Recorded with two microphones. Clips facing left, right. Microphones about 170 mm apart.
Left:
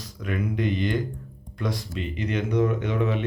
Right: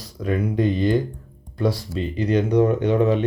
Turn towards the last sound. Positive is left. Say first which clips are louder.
# right 7 dB
turn(degrees=-35)  # may be behind; listen again after turning